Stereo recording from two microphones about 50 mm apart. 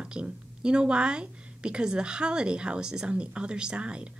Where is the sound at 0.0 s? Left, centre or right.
Centre.